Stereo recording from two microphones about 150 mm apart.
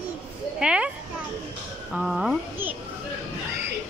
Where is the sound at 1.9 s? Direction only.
5° right (ahead or behind).